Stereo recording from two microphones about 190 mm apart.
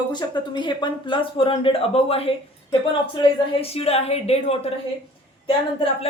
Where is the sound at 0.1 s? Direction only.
25° left (ahead or behind).